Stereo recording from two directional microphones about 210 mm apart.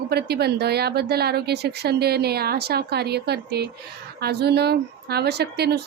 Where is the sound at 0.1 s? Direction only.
50° right (ahead or behind).